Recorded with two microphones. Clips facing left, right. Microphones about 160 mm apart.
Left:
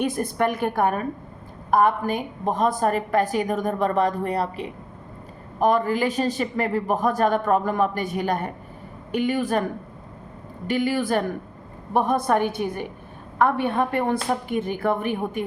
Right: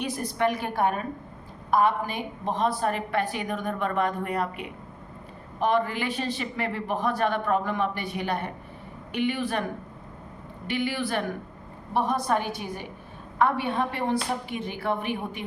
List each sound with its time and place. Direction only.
0.0 s a man's voice: 50° left (ahead or behind)
10.7 s a man's voice: 45° left (ahead or behind)
11.9 s a woman's voice: 55° left (ahead or behind)